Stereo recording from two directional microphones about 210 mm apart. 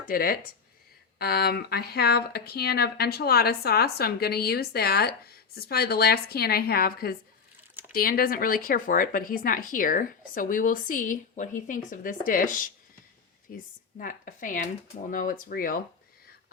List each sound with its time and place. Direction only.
0.1 s speech: 45° left (ahead or behind)